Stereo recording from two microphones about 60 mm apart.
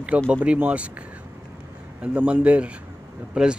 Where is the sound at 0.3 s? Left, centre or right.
Centre.